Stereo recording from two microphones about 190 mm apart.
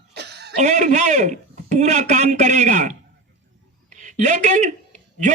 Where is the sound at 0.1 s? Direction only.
60° right (ahead or behind).